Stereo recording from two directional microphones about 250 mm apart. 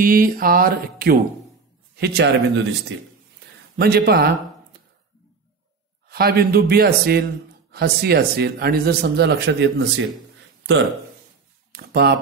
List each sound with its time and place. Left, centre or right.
0.0 s speech: right
3.7 s speech: right
6.0 s speech: right
11.7 s speech: right